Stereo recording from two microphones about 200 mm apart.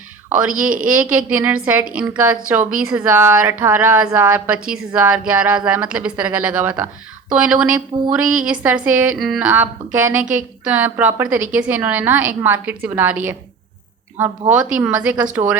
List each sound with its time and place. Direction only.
0.9 s a woman's voice: 5° right (ahead or behind)
7.9 s speech: 25° right (ahead or behind)
8.4 s a woman's voice: 5° right (ahead or behind)